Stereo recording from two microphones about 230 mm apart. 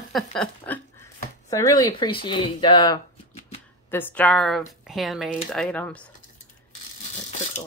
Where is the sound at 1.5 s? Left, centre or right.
Centre.